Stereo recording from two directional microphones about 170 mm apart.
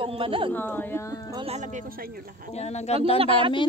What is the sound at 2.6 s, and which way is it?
Speech, 40° left (ahead or behind).